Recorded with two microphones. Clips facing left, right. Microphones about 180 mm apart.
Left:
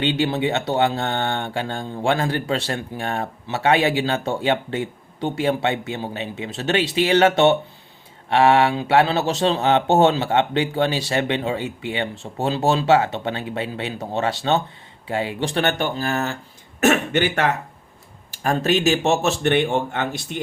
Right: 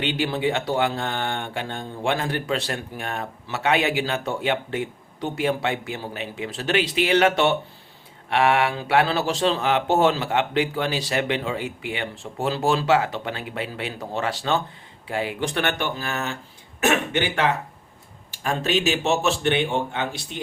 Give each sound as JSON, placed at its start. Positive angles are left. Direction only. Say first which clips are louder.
{"t": 0.0, "sound": "speech", "louder": "left 3 dB", "side_deg": 25}